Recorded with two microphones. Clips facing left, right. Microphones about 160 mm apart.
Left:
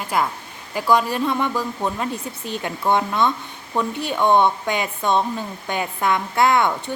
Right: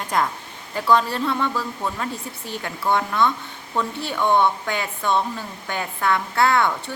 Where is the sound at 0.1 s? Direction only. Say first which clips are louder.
Left 1 dB; 5° left (ahead or behind).